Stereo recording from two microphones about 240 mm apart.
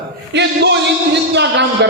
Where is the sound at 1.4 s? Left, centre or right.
Right.